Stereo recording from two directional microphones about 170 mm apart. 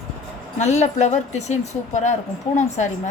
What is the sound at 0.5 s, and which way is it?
Speech, 45° left (ahead or behind).